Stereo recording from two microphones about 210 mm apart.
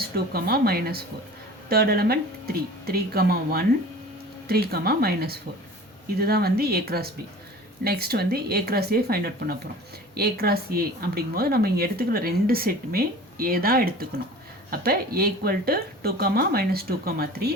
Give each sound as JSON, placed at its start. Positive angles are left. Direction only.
{"t": 0.3, "sound": "speech", "side_deg": -50}